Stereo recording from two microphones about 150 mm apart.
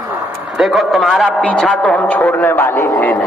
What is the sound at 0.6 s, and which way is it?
A man's voice, centre (ahead or behind).